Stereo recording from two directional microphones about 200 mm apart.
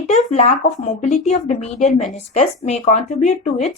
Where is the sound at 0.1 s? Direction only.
35° left (ahead or behind).